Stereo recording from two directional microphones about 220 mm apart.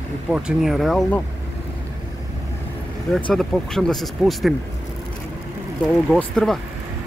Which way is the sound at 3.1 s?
Centre (ahead or behind).